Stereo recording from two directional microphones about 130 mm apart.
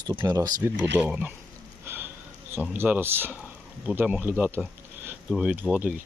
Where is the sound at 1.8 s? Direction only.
15° right (ahead or behind).